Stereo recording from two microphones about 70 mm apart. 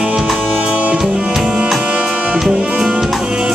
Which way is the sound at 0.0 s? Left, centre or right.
Centre.